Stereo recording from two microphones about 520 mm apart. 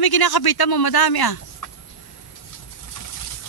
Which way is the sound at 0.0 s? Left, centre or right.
Left.